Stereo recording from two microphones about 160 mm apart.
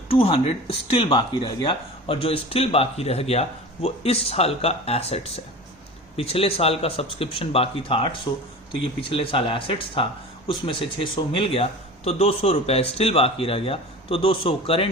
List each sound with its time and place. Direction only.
0.1 s speech: 35° left (ahead or behind)